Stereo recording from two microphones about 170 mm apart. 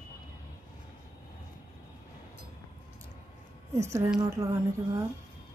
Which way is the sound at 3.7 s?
15° right (ahead or behind).